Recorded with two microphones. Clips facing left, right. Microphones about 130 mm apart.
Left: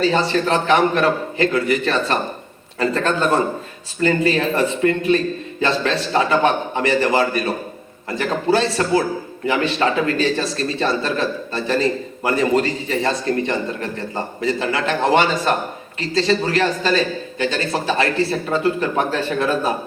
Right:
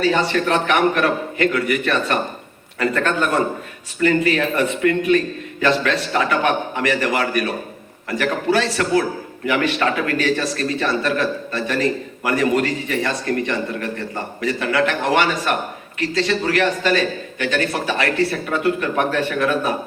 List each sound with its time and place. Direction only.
0.0 s a man's voice: 30° left (ahead or behind)
8.7 s a man's voice: 25° left (ahead or behind)